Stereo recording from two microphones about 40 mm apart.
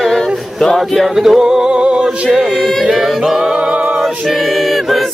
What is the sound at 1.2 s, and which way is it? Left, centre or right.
Music, centre.